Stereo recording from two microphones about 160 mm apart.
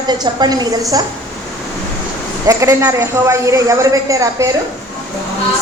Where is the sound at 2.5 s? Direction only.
20° right (ahead or behind).